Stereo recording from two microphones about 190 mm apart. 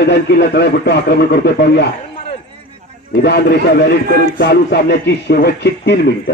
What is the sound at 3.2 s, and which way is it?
A man's voice, 60° left (ahead or behind).